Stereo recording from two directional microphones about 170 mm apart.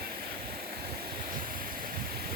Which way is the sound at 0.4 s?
60° right (ahead or behind).